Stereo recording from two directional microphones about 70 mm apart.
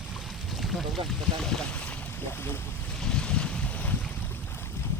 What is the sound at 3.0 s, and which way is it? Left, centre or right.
Boat, centre.